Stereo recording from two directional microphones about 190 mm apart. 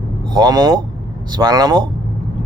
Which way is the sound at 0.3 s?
20° right (ahead or behind).